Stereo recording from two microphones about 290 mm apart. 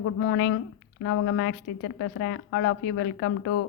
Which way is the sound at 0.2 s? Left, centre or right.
Left.